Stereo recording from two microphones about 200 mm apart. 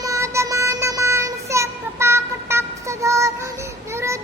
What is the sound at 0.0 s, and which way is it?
Child singing, 15° right (ahead or behind).